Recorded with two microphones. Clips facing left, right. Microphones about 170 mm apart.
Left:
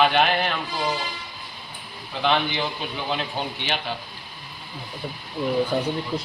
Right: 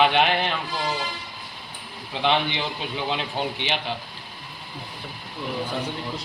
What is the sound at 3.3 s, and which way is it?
Speech, 20° right (ahead or behind).